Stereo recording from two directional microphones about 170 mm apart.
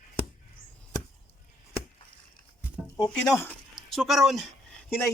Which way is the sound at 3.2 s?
15° left (ahead or behind).